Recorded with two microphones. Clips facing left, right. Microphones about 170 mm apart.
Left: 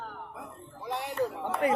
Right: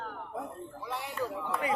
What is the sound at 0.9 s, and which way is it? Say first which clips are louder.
Speech: left 4 dB; 70° left (ahead or behind).